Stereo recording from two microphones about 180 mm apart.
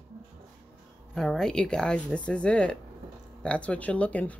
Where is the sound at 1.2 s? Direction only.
Centre (ahead or behind).